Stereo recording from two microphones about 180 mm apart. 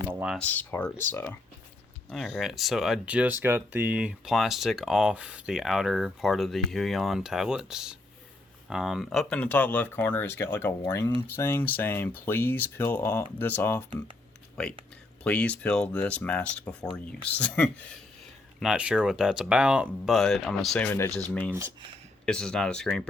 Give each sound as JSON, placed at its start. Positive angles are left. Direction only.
{"t": 0.1, "sound": "a sound", "side_deg": -10}
{"t": 0.3, "sound": "speech", "side_deg": 10}
{"t": 2.0, "sound": "speech", "side_deg": 0}
{"t": 18.6, "sound": "speech", "side_deg": -5}
{"t": 20.8, "sound": "speech", "side_deg": 15}
{"t": 22.3, "sound": "speech", "side_deg": 5}